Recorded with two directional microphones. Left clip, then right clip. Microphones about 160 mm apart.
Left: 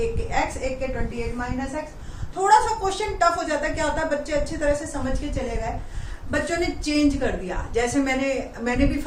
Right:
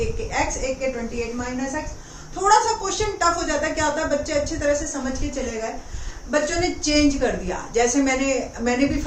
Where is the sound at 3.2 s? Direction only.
15° left (ahead or behind).